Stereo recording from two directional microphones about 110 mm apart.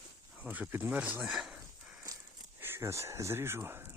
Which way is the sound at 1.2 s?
5° right (ahead or behind).